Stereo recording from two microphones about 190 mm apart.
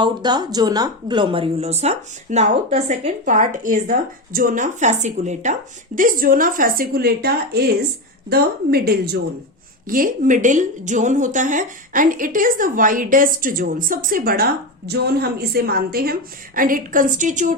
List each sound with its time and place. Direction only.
0.0 s a woman's voice: 20° right (ahead or behind); by 9.2 s 55° right (ahead or behind)
9.9 s speech: 45° right (ahead or behind)